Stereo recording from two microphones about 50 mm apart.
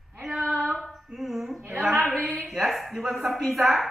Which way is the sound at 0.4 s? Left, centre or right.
Right.